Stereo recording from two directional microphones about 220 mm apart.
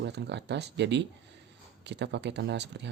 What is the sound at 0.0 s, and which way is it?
Speech, 50° right (ahead or behind).